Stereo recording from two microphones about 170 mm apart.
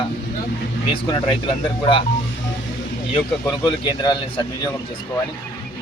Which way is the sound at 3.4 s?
20° left (ahead or behind).